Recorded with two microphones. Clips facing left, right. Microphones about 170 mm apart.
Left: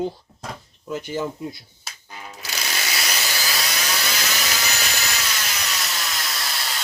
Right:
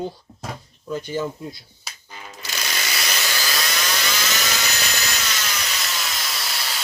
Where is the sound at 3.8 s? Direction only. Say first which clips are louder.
Right 1 dB; 5° left (ahead or behind).